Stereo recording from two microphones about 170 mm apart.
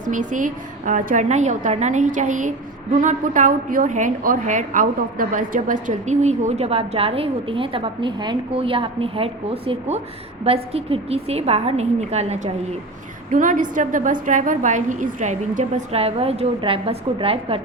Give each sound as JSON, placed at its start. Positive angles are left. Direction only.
{"t": 0.0, "sound": "a woman's voice", "side_deg": -50}
{"t": 13.3, "sound": "a woman's voice", "side_deg": -50}